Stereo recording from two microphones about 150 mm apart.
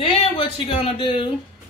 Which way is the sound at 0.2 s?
40° left (ahead or behind).